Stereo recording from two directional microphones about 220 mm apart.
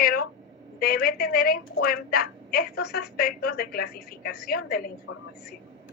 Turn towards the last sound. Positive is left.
turn(degrees=40)  # may be behind; listen again after turning